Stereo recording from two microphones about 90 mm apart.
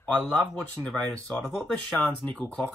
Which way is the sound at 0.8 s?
10° left (ahead or behind).